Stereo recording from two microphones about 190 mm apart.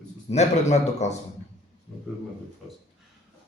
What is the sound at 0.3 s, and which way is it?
Speech, 35° left (ahead or behind).